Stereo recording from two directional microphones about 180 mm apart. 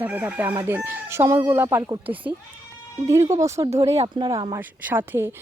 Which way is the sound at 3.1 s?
15° right (ahead or behind).